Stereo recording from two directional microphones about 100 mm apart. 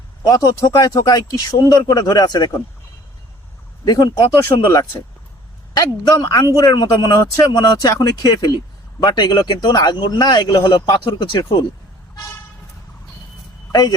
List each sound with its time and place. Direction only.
0.2 s speech: 40° left (ahead or behind)
3.8 s speech: 45° left (ahead or behind)